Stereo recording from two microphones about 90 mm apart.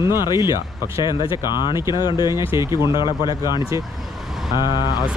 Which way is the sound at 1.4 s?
50° left (ahead or behind).